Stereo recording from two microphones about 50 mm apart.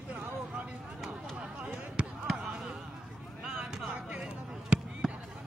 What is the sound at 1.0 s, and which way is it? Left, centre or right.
Basketball bounce, centre.